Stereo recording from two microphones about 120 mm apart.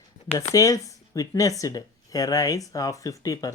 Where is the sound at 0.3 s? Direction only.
30° left (ahead or behind).